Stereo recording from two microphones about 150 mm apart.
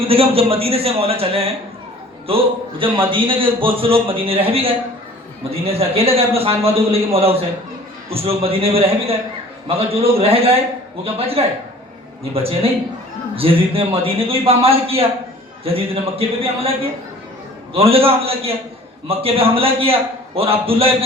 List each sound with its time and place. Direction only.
0.1 s a man's voice: 40° right (ahead or behind)
5.5 s a man's voice: 40° right (ahead or behind)
17.7 s a man's voice: 40° right (ahead or behind)